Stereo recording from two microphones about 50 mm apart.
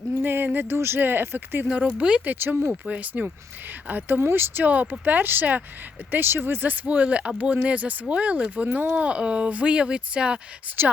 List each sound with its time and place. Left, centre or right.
0.2 s speech: right
1.6 s speech: right
2.2 s speech: right
2.8 s speech: right
4.2 s speech: right
4.6 s speech: right
10.7 s speech: right